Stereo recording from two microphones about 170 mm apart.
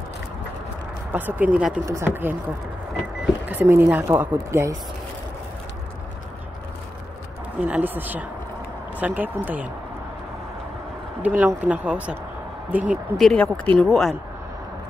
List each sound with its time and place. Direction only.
1.1 s speech: 10° right (ahead or behind)
3.4 s speech: 10° right (ahead or behind)
7.6 s speech: 10° right (ahead or behind)
11.2 s speech: 10° right (ahead or behind)